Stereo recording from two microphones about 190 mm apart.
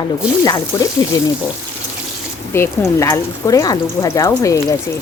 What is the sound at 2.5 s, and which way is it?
Stir, 15° left (ahead or behind).